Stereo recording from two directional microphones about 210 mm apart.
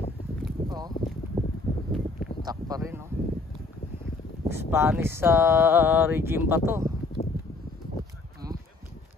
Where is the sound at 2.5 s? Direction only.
15° right (ahead or behind).